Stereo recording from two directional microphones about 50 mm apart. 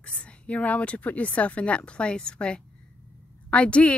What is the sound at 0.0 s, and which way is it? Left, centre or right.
Speech, left.